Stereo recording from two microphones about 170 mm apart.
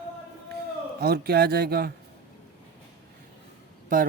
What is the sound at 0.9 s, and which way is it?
Speech, 70° right (ahead or behind).